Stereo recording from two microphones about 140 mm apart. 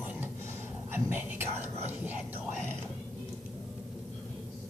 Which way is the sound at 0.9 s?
15° right (ahead or behind).